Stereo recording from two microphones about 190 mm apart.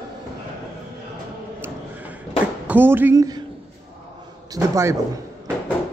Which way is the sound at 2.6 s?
10° right (ahead or behind).